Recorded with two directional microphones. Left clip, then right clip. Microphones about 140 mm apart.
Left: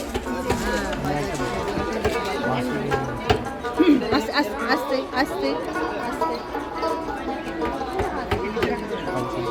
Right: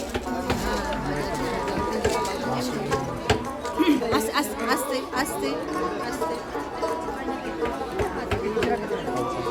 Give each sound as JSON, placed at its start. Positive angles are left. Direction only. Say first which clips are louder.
{"t": 3.8, "sound": "chatter", "louder": "left 3 dB", "side_deg": 75}